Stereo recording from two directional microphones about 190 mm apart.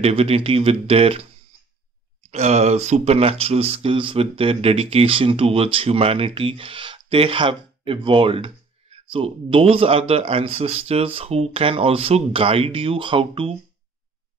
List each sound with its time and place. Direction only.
0.0 s speech: 30° right (ahead or behind)
2.3 s speech: 35° right (ahead or behind)